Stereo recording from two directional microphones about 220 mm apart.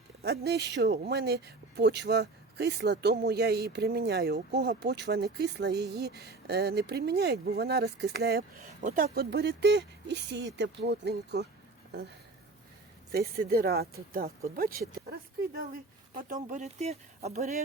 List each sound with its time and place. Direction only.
0.2 s speech: 45° right (ahead or behind)
9.1 s speech: 50° right (ahead or behind)
13.1 s speech: 45° right (ahead or behind)